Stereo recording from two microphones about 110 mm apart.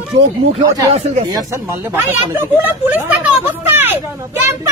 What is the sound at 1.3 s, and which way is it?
Speech, 25° right (ahead or behind).